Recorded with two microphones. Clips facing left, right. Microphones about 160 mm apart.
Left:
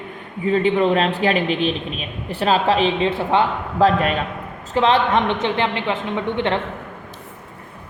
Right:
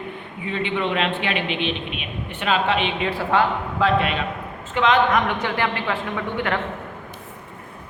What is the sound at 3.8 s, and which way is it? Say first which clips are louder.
A man's voice: left 4 dB; 40° left (ahead or behind).